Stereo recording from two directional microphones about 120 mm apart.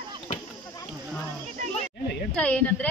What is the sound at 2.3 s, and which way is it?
Speech, 10° left (ahead or behind).